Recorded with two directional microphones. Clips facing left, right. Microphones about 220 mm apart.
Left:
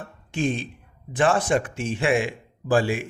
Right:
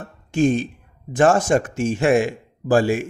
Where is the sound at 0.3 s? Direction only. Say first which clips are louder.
Right 7 dB; 45° right (ahead or behind).